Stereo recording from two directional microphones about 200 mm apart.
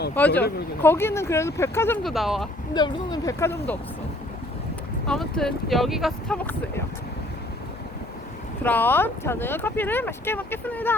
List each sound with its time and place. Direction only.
0.1 s speech: 10° left (ahead or behind)
2.0 s speech: centre (ahead or behind)
2.7 s speech: 20° left (ahead or behind)
5.0 s speech: centre (ahead or behind)
8.6 s speech: 10° left (ahead or behind)